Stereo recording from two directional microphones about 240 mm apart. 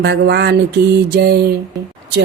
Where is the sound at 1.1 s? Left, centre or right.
Right.